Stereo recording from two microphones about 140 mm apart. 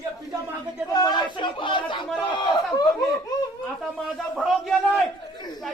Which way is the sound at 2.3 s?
35° left (ahead or behind).